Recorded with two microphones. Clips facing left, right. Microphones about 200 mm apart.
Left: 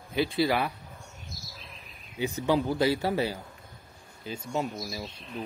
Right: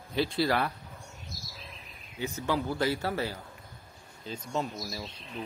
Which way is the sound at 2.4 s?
15° left (ahead or behind).